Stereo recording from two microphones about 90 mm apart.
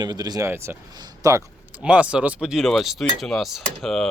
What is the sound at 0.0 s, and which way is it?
Speech, 50° right (ahead or behind).